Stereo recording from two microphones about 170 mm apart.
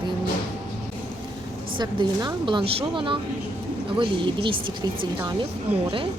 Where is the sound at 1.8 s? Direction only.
25° right (ahead or behind).